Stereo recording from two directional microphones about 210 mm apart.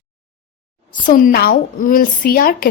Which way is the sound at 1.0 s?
40° left (ahead or behind).